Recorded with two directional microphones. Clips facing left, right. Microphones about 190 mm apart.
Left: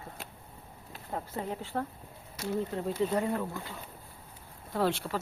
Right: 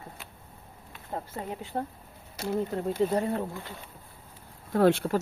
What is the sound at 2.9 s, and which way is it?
Speech, 35° right (ahead or behind).